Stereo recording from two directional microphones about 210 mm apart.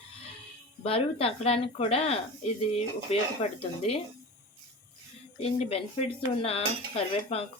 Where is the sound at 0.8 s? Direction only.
30° left (ahead or behind).